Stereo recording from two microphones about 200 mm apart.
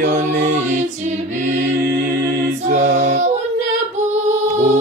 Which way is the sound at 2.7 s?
35° right (ahead or behind).